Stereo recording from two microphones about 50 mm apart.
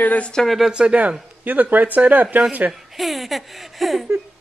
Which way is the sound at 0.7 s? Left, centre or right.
Right.